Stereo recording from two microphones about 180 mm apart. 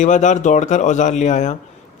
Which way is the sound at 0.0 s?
40° left (ahead or behind).